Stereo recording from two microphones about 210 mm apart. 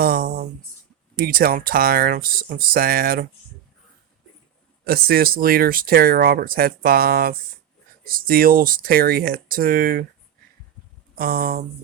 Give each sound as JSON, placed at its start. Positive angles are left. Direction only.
{"t": 0.0, "sound": "a sound", "side_deg": -50}
{"t": 1.1, "sound": "speech", "side_deg": -45}
{"t": 4.9, "sound": "speech", "side_deg": -45}
{"t": 11.1, "sound": "speech", "side_deg": -45}